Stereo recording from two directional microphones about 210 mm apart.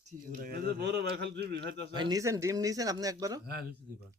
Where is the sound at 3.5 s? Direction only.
45° right (ahead or behind).